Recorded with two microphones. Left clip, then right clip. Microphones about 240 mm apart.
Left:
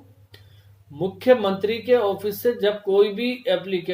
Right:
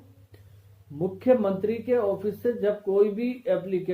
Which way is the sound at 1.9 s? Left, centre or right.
Left.